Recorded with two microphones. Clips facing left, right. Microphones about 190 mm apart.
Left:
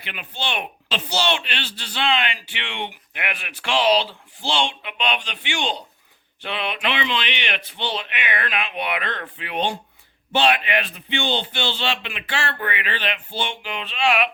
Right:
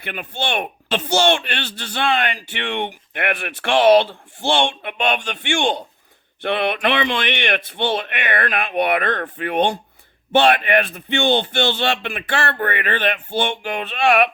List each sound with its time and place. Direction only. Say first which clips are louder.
0.0 s speech: right 5 dB; 50° right (ahead or behind)